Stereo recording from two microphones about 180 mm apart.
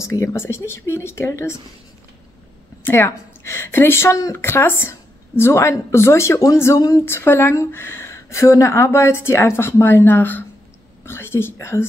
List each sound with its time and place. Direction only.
0.0 s a woman's voice: 15° left (ahead or behind)
2.8 s a woman's voice: 15° left (ahead or behind)